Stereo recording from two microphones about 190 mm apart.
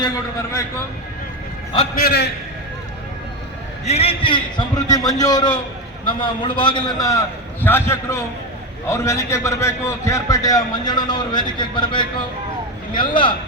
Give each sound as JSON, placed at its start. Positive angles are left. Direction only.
{"t": 2.0, "sound": "a man's voice", "side_deg": 55}
{"t": 3.8, "sound": "a man's voice", "side_deg": 30}